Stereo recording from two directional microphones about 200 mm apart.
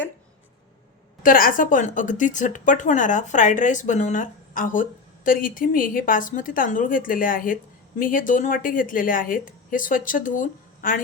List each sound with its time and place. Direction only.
1.2 s a woman's voice: 45° left (ahead or behind)